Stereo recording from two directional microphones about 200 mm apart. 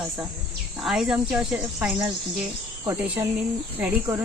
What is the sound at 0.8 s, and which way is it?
Speech, 5° right (ahead or behind).